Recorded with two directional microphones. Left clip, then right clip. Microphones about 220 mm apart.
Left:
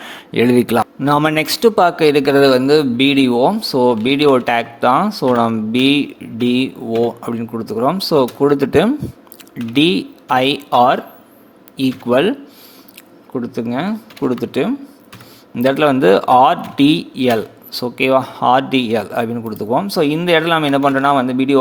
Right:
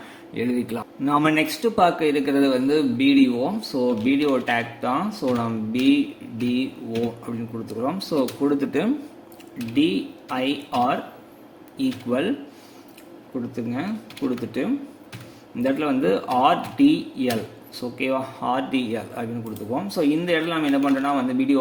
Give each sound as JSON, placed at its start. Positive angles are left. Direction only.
{"t": 0.1, "sound": "speech", "side_deg": 45}
{"t": 7.3, "sound": "speech", "side_deg": 40}
{"t": 13.6, "sound": "speech", "side_deg": 45}